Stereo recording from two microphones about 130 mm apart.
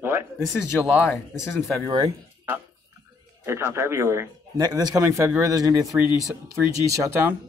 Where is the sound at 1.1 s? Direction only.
20° left (ahead or behind).